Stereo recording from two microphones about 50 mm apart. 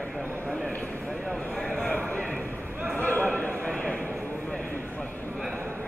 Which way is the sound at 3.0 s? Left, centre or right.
Left.